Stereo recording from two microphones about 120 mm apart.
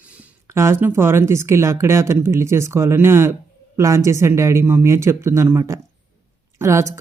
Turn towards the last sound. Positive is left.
turn(degrees=-25)  # may be behind; listen again after turning